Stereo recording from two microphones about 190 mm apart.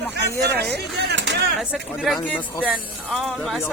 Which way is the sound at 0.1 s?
60° right (ahead or behind).